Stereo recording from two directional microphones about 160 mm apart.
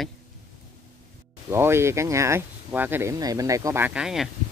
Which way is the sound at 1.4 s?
15° right (ahead or behind).